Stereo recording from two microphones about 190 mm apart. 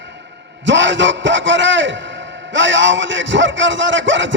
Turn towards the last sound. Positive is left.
turn(degrees=-75)  # may be behind; listen again after turning